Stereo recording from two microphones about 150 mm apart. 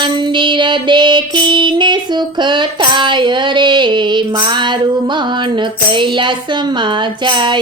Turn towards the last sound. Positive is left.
turn(degrees=-30)  # may be behind; listen again after turning